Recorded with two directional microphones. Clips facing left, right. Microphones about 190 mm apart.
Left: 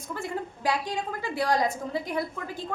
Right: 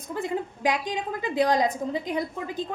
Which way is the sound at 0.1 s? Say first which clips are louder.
Right 4 dB; 20° right (ahead or behind).